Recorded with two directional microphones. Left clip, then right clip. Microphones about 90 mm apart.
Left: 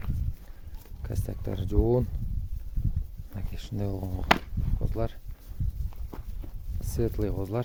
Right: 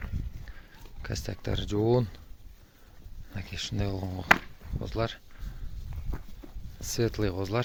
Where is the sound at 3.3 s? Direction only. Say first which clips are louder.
Right 6 dB; 30° left (ahead or behind).